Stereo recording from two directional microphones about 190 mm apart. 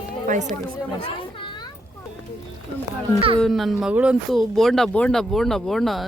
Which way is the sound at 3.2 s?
30° right (ahead or behind).